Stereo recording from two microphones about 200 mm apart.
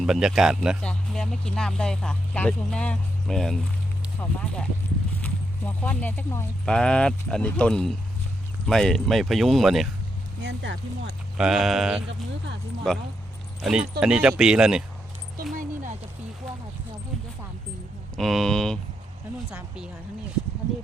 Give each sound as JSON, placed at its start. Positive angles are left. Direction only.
{"t": 0.0, "sound": "speech", "side_deg": 0}
{"t": 10.4, "sound": "speech", "side_deg": -60}
{"t": 11.3, "sound": "speech", "side_deg": -5}
{"t": 15.5, "sound": "dog", "side_deg": -40}
{"t": 18.2, "sound": "speech", "side_deg": 0}